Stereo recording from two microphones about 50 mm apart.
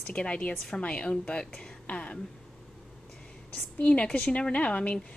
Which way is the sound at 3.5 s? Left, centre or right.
Left.